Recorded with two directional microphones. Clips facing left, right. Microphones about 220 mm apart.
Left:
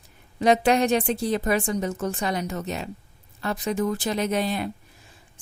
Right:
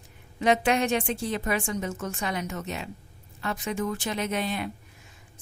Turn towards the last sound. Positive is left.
turn(degrees=35)  # may be behind; listen again after turning